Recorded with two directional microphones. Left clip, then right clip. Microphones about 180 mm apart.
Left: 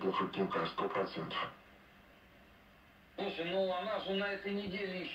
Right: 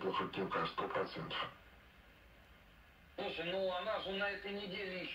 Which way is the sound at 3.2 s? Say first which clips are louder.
Left 3 dB; 55° right (ahead or behind).